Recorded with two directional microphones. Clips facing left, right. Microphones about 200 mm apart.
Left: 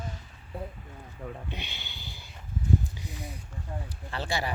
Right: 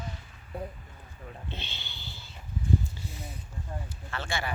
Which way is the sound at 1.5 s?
15° left (ahead or behind).